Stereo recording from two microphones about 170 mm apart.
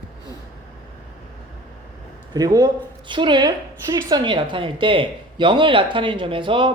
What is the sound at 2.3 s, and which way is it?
A woman's voice, 25° right (ahead or behind).